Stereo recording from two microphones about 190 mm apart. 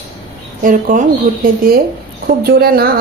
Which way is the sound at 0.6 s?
45° right (ahead or behind).